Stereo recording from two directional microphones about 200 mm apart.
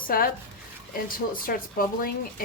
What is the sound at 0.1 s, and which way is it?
A woman's voice, 45° left (ahead or behind).